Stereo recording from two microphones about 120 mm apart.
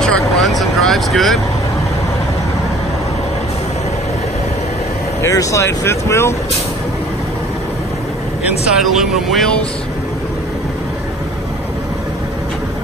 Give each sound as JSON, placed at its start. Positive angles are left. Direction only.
{"t": 0.0, "sound": "vehicle", "side_deg": 5}
{"t": 5.2, "sound": "speech", "side_deg": 25}
{"t": 8.5, "sound": "speech", "side_deg": -5}